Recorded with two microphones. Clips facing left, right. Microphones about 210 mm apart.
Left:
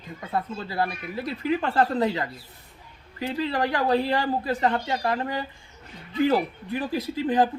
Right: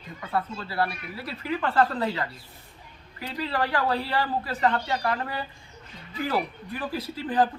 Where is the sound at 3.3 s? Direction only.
20° left (ahead or behind).